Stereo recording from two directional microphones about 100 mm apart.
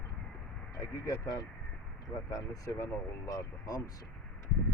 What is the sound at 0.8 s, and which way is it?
Speech, 30° left (ahead or behind).